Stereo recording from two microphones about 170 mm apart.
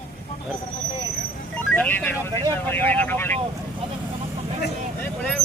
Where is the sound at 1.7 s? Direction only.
10° left (ahead or behind).